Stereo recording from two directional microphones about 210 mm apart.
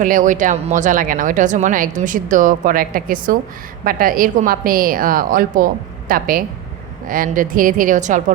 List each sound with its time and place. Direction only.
0.0 s a woman's voice: 40° right (ahead or behind)